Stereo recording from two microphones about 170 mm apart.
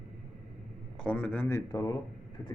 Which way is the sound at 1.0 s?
5° left (ahead or behind).